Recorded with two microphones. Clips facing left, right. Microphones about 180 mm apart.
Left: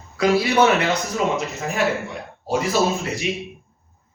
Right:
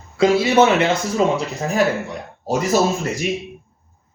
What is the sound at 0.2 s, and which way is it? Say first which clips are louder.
Speech: right 3 dB; 25° right (ahead or behind).